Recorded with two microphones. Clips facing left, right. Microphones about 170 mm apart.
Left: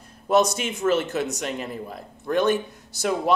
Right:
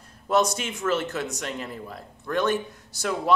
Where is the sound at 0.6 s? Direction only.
15° left (ahead or behind).